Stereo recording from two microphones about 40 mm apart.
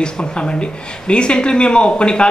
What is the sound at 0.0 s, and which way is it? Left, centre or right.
A man's voice, left.